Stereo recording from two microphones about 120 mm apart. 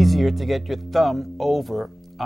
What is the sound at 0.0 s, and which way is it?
Speech, centre (ahead or behind).